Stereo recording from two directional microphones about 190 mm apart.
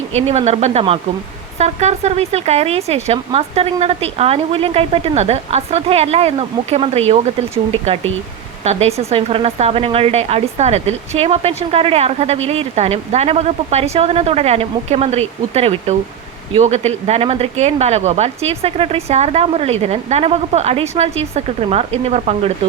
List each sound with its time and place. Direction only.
0.1 s speech: 35° right (ahead or behind)